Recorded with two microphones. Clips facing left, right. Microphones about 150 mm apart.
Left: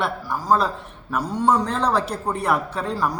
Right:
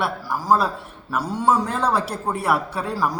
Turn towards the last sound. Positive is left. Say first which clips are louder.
# even
turn(degrees=-10)  # may be behind; listen again after turning